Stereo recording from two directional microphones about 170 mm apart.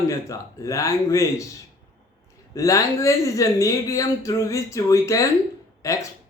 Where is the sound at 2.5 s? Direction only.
20° left (ahead or behind).